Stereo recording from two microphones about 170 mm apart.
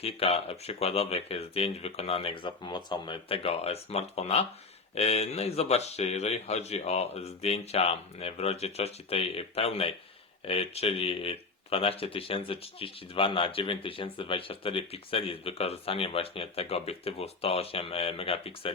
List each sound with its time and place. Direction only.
0.0 s speech: 35° left (ahead or behind)